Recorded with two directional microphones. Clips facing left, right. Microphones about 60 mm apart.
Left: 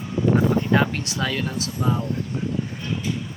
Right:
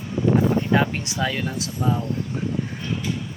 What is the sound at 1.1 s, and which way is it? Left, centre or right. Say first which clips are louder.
Speech: right 1 dB; centre.